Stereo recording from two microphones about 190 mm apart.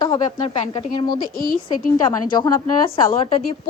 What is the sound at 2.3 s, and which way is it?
A woman's voice, 25° left (ahead or behind).